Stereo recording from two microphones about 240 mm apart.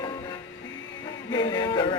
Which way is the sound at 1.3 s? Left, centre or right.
Centre.